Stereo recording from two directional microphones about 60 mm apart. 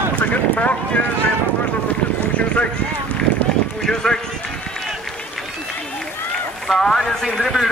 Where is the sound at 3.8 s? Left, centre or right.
Centre.